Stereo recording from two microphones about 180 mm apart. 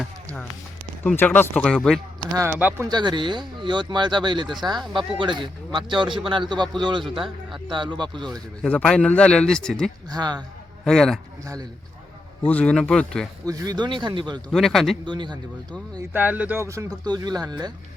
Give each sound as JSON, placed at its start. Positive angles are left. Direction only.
{"t": 1.0, "sound": "speech", "side_deg": 10}
{"t": 2.3, "sound": "speech", "side_deg": -15}
{"t": 2.9, "sound": "speech", "side_deg": -25}
{"t": 4.4, "sound": "speech", "side_deg": 0}
{"t": 4.9, "sound": "speech", "side_deg": -25}
{"t": 8.6, "sound": "speech", "side_deg": 5}
{"t": 10.1, "sound": "speech", "side_deg": -25}
{"t": 10.8, "sound": "speech", "side_deg": 5}
{"t": 12.5, "sound": "speech", "side_deg": 5}
{"t": 13.4, "sound": "speech", "side_deg": -20}
{"t": 14.5, "sound": "speech", "side_deg": 0}
{"t": 15.0, "sound": "speech", "side_deg": -25}
{"t": 16.0, "sound": "speech", "side_deg": -10}